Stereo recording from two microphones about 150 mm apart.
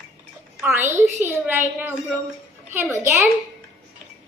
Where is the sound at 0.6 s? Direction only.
15° right (ahead or behind).